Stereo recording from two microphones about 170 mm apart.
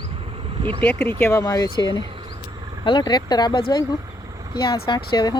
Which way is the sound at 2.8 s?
25° left (ahead or behind).